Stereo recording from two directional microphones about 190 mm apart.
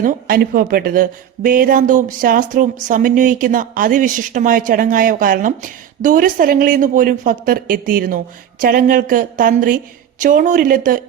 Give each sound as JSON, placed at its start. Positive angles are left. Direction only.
{"t": 0.0, "sound": "speech", "side_deg": -50}